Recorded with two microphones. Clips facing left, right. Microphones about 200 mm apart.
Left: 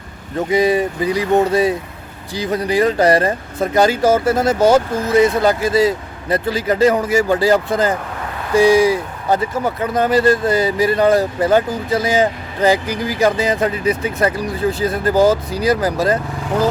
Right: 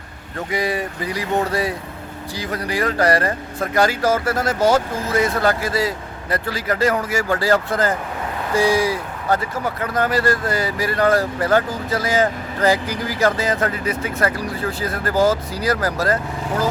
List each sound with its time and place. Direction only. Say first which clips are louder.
0.3 s speech: left 8 dB; 20° left (ahead or behind)